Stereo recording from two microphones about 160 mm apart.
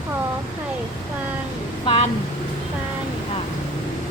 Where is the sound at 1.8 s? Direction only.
35° left (ahead or behind).